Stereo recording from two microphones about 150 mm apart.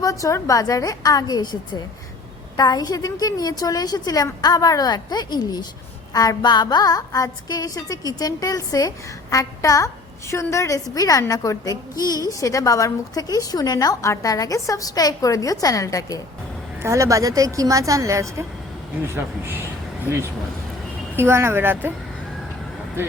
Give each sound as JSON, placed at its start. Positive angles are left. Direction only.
{"t": 0.0, "sound": "a woman's voice", "side_deg": 20}
{"t": 2.6, "sound": "a woman's voice", "side_deg": 25}
{"t": 16.8, "sound": "a woman's voice", "side_deg": -20}